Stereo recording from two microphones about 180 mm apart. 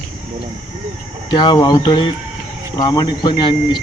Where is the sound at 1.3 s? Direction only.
25° left (ahead or behind).